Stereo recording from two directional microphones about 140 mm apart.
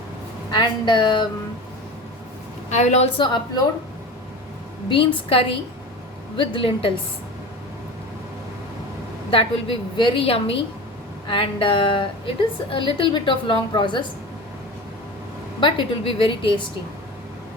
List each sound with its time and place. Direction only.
0.5 s a woman's voice: 30° left (ahead or behind)
2.6 s a woman's voice: 55° left (ahead or behind)
4.9 s a woman's voice: 40° left (ahead or behind)
9.3 s a woman's voice: 40° left (ahead or behind)
15.6 s a woman's voice: 40° left (ahead or behind)